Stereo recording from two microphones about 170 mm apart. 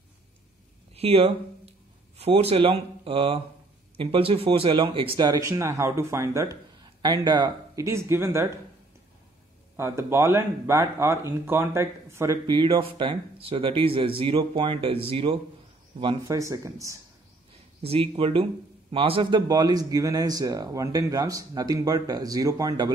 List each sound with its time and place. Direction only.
0.9 s speech: 35° right (ahead or behind); by 8.5 s 15° right (ahead or behind)
9.8 s speech: 15° right (ahead or behind)
12.4 s speech: 30° right (ahead or behind)
16.3 s speech: 20° right (ahead or behind)
17.8 s speech: 35° right (ahead or behind)
19.4 s speech: 25° right (ahead or behind)